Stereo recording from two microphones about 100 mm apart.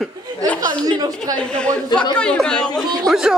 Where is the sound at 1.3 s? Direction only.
10° left (ahead or behind).